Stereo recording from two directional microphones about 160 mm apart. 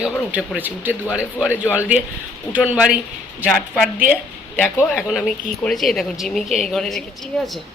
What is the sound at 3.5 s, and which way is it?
Speech, centre (ahead or behind).